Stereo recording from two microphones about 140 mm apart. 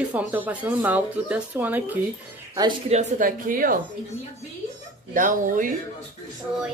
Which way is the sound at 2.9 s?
65° right (ahead or behind).